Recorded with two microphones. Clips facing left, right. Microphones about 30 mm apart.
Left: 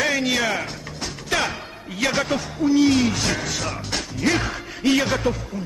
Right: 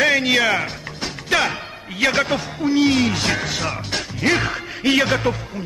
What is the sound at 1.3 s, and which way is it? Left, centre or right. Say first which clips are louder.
Music: right 4 dB; right.